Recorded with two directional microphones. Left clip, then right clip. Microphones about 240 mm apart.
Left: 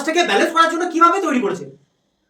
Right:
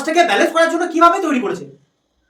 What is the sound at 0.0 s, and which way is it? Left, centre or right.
Speech, centre.